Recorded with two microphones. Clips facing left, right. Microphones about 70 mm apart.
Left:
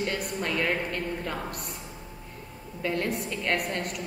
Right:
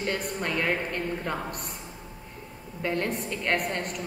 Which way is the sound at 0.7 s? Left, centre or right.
Right.